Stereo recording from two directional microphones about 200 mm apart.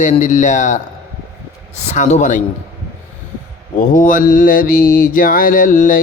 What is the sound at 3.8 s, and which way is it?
Mantra, 40° left (ahead or behind).